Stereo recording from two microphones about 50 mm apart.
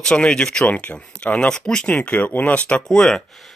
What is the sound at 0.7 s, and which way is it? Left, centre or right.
Speech, left.